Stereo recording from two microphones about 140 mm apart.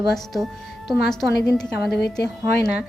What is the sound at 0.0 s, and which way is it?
A woman's voice, centre (ahead or behind).